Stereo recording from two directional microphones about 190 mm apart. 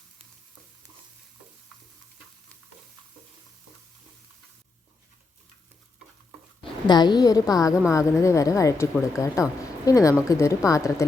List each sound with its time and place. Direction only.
6.6 s a woman's voice: 20° left (ahead or behind)